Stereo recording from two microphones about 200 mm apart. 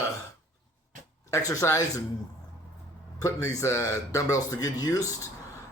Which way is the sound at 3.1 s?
20° left (ahead or behind).